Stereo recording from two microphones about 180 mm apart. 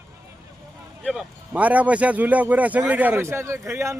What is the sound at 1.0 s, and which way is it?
A man's voice, 5° right (ahead or behind).